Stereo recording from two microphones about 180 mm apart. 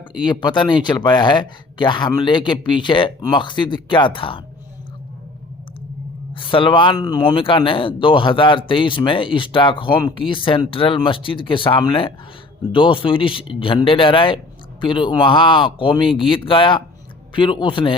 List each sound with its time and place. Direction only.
0.3 s speech: 25° left (ahead or behind)
6.3 s speech: 30° left (ahead or behind)